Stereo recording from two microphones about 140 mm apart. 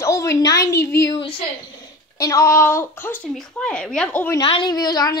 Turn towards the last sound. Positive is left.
turn(degrees=25)  # may be behind; listen again after turning